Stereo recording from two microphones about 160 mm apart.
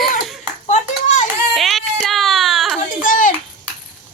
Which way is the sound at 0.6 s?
50° left (ahead or behind).